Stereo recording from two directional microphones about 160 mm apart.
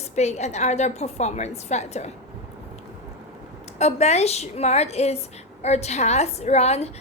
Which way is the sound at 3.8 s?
45° left (ahead or behind).